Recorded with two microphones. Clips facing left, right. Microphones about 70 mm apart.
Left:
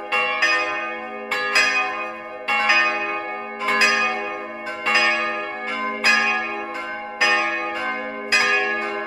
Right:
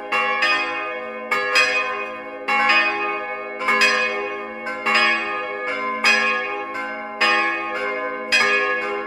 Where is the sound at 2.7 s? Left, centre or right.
Centre.